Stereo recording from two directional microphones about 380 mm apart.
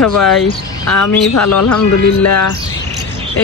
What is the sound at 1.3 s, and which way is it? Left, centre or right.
Speech, left.